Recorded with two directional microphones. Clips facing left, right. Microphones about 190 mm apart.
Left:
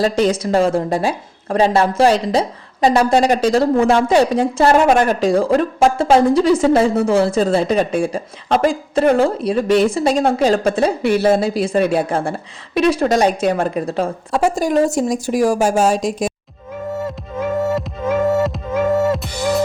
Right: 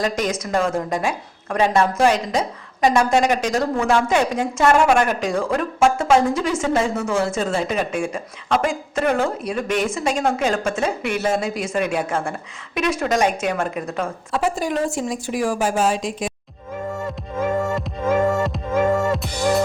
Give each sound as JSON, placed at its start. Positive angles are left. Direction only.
{"t": 0.0, "sound": "a woman's voice", "side_deg": 30}
{"t": 18.3, "sound": "music", "side_deg": 5}